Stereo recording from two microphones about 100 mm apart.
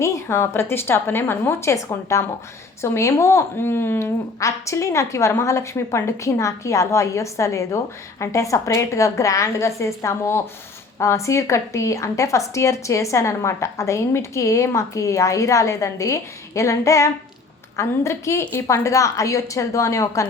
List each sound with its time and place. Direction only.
0.0 s a woman's voice: 30° left (ahead or behind)